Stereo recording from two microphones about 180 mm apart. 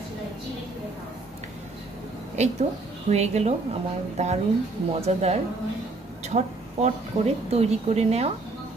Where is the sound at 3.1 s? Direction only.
35° right (ahead or behind).